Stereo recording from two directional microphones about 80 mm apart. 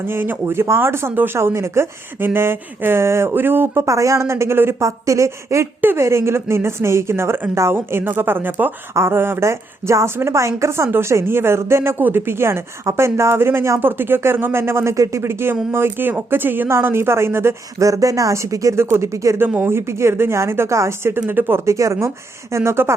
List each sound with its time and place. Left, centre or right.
0.0 s speech: right
3.8 s speech: right
17.8 s speech: right
19.4 s speech: right
21.7 s speech: right